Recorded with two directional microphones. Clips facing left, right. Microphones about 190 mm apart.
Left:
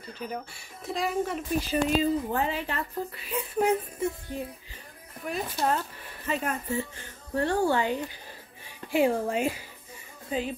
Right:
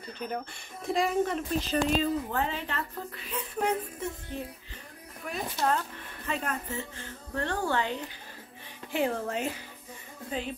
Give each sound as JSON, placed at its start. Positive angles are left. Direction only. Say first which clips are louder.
{"t": 0.2, "sound": "a woman's voice", "louder": "right 1 dB", "side_deg": 5}
{"t": 5.3, "sound": "a woman's voice", "louder": "left 1 dB", "side_deg": 5}